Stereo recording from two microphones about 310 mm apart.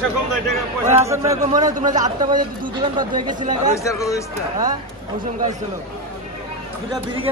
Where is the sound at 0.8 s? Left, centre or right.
Centre.